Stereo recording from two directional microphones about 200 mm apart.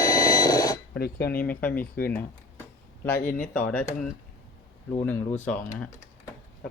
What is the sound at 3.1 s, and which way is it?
Speech, 45° left (ahead or behind).